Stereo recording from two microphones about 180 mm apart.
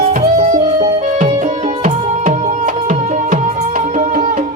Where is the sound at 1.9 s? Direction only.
45° right (ahead or behind).